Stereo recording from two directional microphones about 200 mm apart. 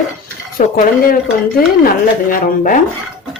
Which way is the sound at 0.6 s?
45° left (ahead or behind).